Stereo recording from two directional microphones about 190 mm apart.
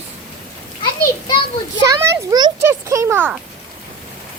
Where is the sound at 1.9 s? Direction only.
15° right (ahead or behind).